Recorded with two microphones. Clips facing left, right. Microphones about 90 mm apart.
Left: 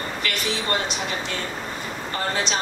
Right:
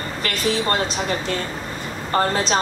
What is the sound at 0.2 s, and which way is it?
Speech, 40° right (ahead or behind).